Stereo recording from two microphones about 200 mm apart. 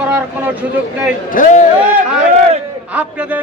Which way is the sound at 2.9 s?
5° right (ahead or behind).